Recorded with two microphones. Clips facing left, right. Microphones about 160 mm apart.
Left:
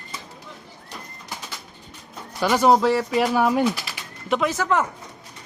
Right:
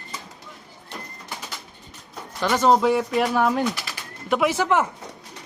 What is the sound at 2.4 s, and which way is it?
Speech, 10° left (ahead or behind).